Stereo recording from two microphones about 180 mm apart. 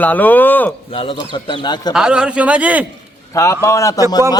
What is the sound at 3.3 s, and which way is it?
Speech, 15° left (ahead or behind).